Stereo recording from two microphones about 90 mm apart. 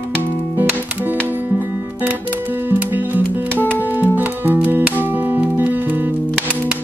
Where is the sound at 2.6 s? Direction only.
20° right (ahead or behind).